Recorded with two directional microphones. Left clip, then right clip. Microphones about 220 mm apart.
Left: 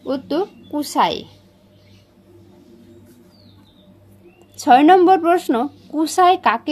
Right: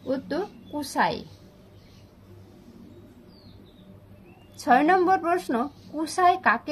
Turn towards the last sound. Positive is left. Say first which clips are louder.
# left 7 dB
turn(degrees=40)  # may be behind; listen again after turning